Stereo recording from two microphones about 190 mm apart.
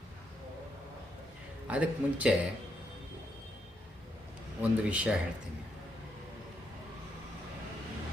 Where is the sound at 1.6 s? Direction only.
5° right (ahead or behind).